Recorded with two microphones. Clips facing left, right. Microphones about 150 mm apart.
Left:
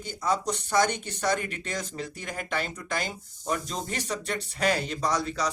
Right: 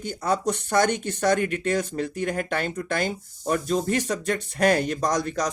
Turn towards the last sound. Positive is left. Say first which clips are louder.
# right 3 dB
turn(degrees=-50)  # may be behind; listen again after turning